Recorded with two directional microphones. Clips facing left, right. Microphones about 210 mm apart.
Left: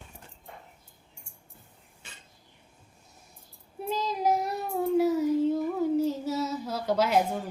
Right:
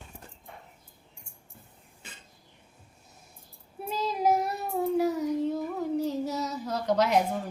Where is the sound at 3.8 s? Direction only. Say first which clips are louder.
Even; 5° right (ahead or behind).